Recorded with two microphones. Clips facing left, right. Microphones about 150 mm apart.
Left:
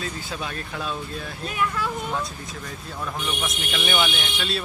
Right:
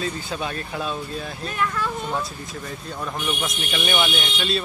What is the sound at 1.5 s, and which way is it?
Speech, 10° left (ahead or behind).